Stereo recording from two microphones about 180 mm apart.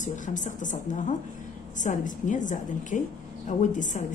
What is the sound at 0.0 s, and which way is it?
A woman's voice, 45° left (ahead or behind).